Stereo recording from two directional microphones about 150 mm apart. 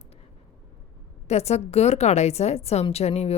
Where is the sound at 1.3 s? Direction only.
45° left (ahead or behind).